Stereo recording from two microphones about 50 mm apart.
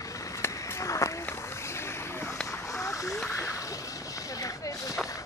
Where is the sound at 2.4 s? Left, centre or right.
Left.